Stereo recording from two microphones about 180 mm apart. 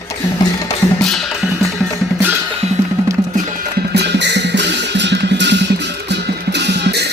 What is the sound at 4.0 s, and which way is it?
Music, 70° right (ahead or behind).